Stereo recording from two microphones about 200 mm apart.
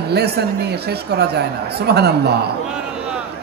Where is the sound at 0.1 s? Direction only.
55° right (ahead or behind).